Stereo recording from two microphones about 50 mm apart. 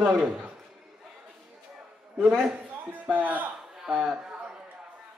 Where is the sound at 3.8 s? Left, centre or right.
Centre.